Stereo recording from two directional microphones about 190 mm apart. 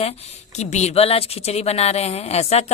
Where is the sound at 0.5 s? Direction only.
35° left (ahead or behind).